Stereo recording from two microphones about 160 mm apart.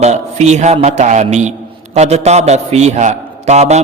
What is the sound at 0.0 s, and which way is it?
A man's voice, 45° right (ahead or behind).